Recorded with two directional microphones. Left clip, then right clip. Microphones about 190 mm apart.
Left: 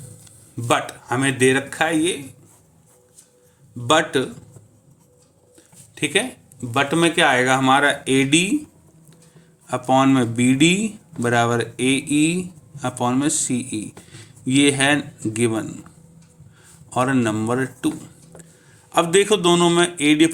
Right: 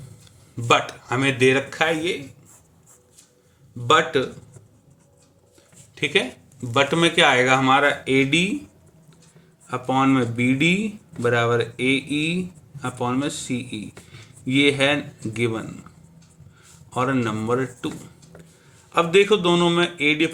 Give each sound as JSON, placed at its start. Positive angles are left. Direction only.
{"t": 0.5, "sound": "speech", "side_deg": 25}
{"t": 3.8, "sound": "speech", "side_deg": 40}
{"t": 5.9, "sound": "speech", "side_deg": 25}
{"t": 6.6, "sound": "speech", "side_deg": 15}
{"t": 9.6, "sound": "speech", "side_deg": 40}
{"t": 16.9, "sound": "speech", "side_deg": 40}